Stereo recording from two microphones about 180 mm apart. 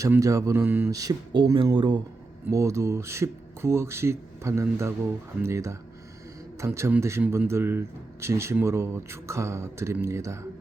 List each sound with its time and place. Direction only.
0.0 s a man's voice: 15° right (ahead or behind)